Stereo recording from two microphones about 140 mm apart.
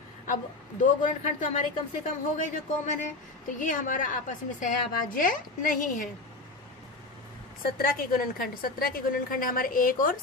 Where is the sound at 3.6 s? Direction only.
65° left (ahead or behind).